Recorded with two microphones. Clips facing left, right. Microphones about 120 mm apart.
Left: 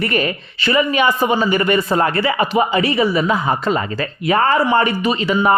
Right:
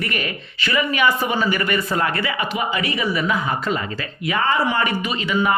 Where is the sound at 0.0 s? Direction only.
35° left (ahead or behind).